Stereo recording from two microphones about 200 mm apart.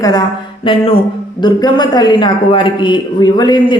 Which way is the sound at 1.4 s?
20° left (ahead or behind).